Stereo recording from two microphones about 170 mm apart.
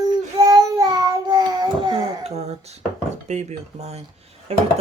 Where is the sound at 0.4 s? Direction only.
20° right (ahead or behind); by 2.6 s 35° right (ahead or behind).